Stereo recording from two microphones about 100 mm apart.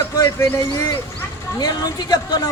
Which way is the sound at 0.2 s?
30° left (ahead or behind).